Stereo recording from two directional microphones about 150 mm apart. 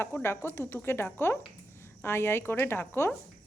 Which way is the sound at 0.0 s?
15° left (ahead or behind).